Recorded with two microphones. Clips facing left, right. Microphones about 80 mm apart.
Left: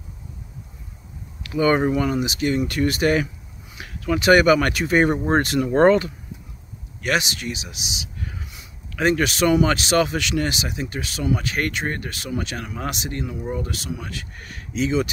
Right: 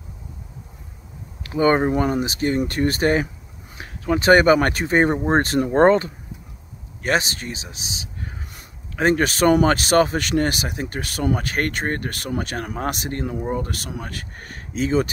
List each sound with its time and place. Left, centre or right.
1.4 s speech: right